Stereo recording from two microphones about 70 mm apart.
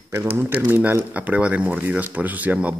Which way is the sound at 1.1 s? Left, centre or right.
Centre.